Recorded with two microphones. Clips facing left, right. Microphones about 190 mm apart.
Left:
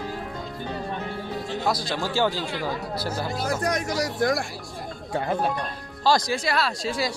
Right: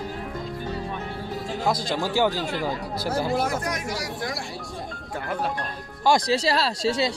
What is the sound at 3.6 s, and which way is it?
Speech, 35° left (ahead or behind).